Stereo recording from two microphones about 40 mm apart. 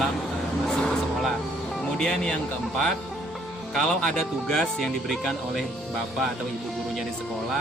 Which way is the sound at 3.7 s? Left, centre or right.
Centre.